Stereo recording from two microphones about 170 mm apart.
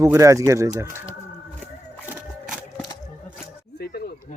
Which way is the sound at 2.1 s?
5° right (ahead or behind).